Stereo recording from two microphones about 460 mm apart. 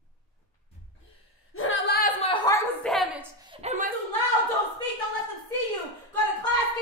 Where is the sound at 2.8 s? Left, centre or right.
Centre.